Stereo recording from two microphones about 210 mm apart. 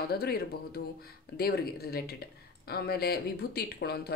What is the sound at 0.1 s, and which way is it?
Speech, 50° left (ahead or behind).